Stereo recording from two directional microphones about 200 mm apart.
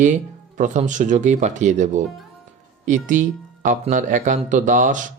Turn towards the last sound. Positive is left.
turn(degrees=-40)  # may be behind; listen again after turning